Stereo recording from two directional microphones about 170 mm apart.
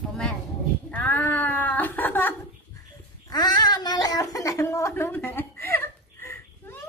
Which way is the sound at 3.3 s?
25° left (ahead or behind).